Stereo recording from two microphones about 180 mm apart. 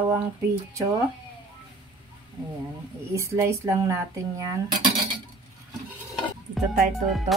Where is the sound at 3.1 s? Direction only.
15° right (ahead or behind).